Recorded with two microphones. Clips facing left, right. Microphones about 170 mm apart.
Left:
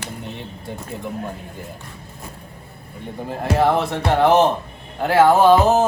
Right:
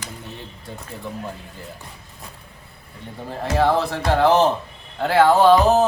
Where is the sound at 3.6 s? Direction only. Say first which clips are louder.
Even; 20° left (ahead or behind).